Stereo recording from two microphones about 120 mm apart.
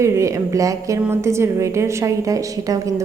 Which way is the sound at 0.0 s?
25° right (ahead or behind).